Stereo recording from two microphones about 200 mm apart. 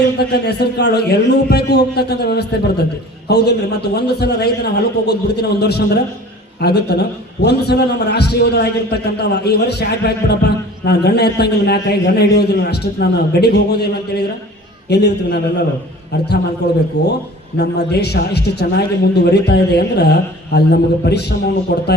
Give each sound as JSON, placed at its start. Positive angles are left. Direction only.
{"t": 0.2, "sound": "a man's voice", "side_deg": 55}